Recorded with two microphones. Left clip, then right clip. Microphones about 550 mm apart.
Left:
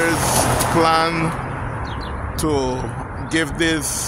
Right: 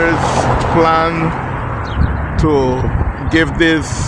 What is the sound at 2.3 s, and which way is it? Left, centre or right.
Speech, left.